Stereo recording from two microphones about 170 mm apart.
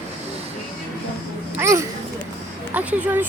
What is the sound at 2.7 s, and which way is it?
Speech, 10° right (ahead or behind).